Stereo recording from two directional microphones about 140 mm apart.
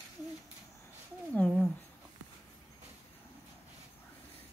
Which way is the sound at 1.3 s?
Centre (ahead or behind).